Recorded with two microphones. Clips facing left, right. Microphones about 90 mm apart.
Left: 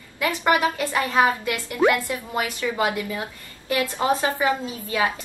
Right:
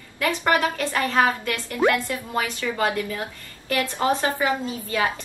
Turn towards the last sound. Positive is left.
turn(degrees=15)  # may be behind; listen again after turning